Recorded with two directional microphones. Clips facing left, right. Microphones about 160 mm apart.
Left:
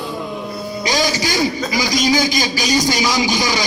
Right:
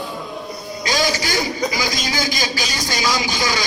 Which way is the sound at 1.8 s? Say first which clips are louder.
Left 7 dB; 20° left (ahead or behind).